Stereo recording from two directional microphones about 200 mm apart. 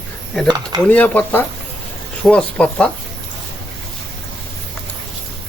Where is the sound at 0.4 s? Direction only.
20° right (ahead or behind).